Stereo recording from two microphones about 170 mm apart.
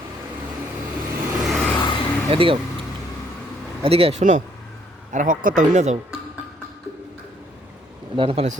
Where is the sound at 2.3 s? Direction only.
30° right (ahead or behind).